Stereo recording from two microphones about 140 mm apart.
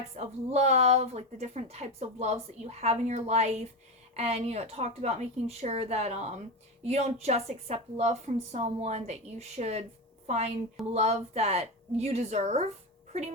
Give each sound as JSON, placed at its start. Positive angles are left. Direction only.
{"t": 0.2, "sound": "speech", "side_deg": -50}